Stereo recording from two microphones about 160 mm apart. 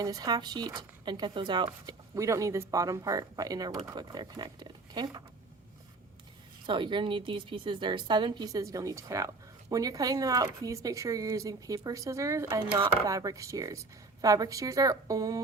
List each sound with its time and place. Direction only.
0.0 s a woman's voice: 25° right (ahead or behind)
6.7 s a woman's voice: 30° right (ahead or behind)